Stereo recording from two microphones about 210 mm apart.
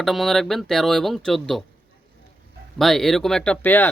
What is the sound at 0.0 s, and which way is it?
Speech, centre (ahead or behind).